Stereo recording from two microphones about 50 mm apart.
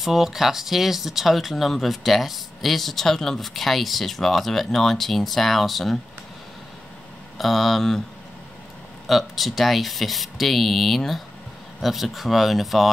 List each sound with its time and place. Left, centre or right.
0.0 s speech: centre
7.3 s speech: centre
9.0 s speech: centre